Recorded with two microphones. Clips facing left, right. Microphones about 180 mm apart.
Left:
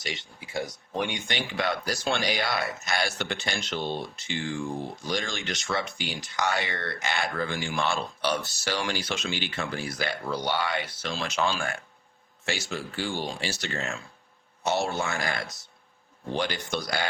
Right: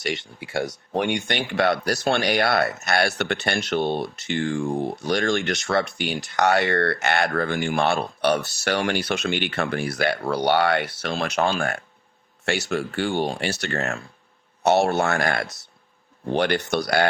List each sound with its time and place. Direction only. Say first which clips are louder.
0.0 s speech: right 9 dB; 65° right (ahead or behind)